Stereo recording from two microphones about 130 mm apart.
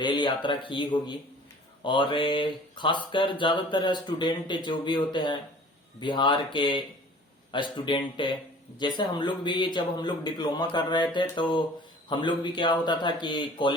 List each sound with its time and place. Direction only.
0.0 s speech: 35° left (ahead or behind)